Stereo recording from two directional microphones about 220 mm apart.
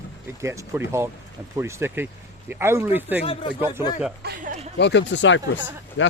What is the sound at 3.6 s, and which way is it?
Speech, 10° right (ahead or behind).